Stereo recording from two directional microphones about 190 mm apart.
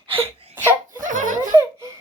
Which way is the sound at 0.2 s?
10° right (ahead or behind).